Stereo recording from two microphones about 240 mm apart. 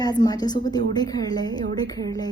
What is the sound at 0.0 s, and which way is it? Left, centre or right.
A woman's voice, centre.